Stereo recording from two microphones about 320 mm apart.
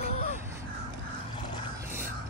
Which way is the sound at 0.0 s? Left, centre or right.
Left.